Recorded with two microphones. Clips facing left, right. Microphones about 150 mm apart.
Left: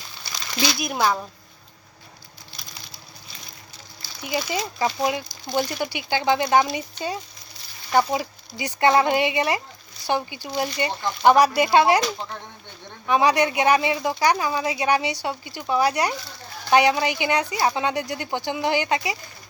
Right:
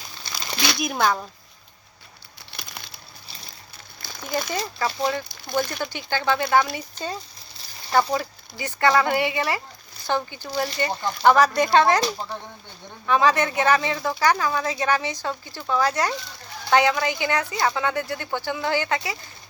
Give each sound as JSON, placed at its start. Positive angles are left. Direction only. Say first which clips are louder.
{"t": 0.8, "sound": "speech", "louder": "right 1 dB", "side_deg": 5}
{"t": 2.5, "sound": "a sound", "louder": "right 4 dB", "side_deg": -60}
{"t": 4.0, "sound": "a sound", "louder": "even", "side_deg": -50}
{"t": 4.4, "sound": "speech", "louder": "left 2 dB", "side_deg": 10}
{"t": 7.9, "sound": "a woman's voice", "louder": "left 1 dB", "side_deg": 15}
{"t": 13.1, "sound": "speech", "louder": "left 1 dB", "side_deg": 15}